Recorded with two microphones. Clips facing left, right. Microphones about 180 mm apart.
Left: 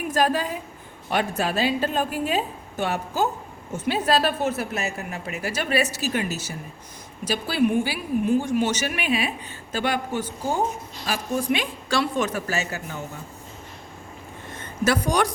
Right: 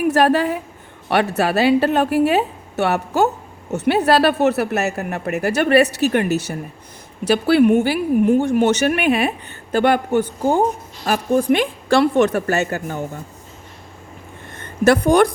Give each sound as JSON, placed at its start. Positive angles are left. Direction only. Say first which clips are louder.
{"t": 0.0, "sound": "a woman's voice", "louder": "right 7 dB", "side_deg": -65}
{"t": 14.6, "sound": "speech", "louder": "right 8 dB", "side_deg": -55}